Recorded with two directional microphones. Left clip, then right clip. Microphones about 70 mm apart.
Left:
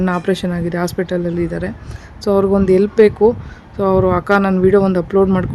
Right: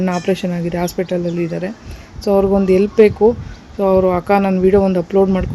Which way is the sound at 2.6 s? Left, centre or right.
Left.